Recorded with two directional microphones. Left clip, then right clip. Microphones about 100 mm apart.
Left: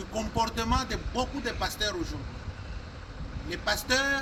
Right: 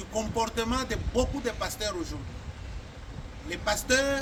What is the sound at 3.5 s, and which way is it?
Speech, 30° right (ahead or behind).